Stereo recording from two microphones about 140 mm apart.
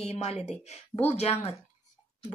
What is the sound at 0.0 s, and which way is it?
Speech, 50° left (ahead or behind).